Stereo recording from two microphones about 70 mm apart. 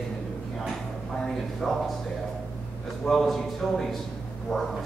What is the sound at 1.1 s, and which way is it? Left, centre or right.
Speech, centre.